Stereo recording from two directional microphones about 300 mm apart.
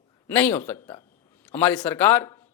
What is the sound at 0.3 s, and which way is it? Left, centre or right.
Speech, centre.